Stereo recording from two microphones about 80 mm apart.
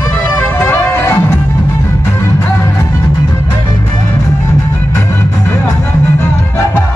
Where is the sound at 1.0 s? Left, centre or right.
Left.